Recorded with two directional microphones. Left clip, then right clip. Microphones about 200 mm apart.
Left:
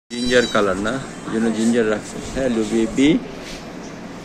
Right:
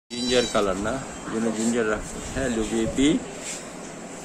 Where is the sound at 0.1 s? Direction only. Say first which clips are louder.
Left 5 dB; 5° right (ahead or behind).